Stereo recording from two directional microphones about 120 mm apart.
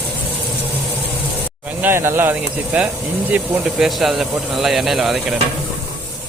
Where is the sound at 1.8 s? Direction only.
20° right (ahead or behind); by 5.2 s centre (ahead or behind).